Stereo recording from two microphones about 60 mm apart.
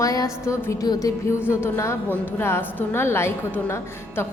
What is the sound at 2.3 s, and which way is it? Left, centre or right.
Speech, left.